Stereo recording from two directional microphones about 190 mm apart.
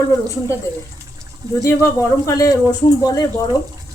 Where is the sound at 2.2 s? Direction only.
20° left (ahead or behind).